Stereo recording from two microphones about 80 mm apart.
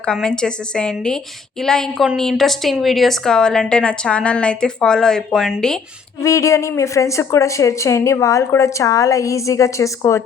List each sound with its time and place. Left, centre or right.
0.0 s a woman's voice: centre
6.2 s a woman's voice: left